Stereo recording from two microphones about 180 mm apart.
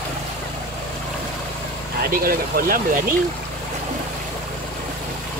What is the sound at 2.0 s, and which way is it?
Speech, 55° right (ahead or behind).